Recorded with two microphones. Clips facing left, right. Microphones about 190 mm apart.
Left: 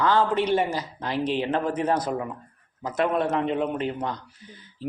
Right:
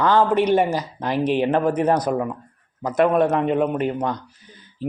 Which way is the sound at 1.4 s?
50° right (ahead or behind).